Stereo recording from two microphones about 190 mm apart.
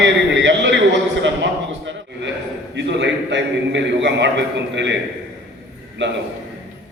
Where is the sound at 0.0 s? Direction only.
70° right (ahead or behind).